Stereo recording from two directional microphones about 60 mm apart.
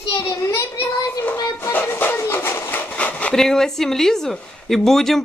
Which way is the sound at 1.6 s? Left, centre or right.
Left.